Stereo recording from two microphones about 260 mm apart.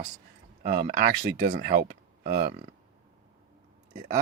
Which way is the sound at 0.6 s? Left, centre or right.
Right.